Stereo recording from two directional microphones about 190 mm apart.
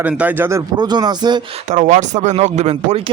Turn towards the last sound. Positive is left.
turn(degrees=-30)  # may be behind; listen again after turning